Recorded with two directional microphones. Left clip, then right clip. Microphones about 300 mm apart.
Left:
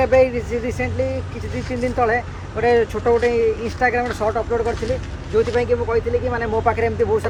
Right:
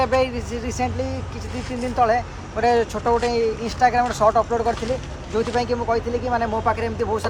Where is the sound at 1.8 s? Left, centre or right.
Centre.